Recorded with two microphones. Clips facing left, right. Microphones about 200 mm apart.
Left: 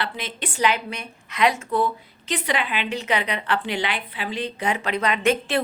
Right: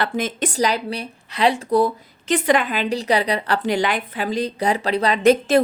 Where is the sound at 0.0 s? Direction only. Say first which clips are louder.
Right 8 dB; 45° right (ahead or behind).